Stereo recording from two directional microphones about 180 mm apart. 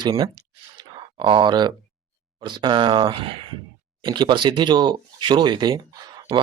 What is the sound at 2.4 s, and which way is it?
Speech, 25° right (ahead or behind).